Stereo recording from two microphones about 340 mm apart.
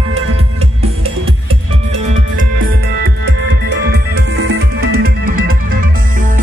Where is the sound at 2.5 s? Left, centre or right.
Right.